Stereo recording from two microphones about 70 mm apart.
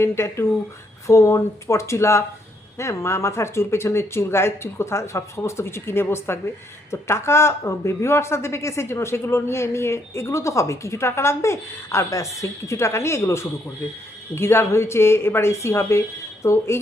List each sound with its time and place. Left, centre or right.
0.0 s a woman's voice: left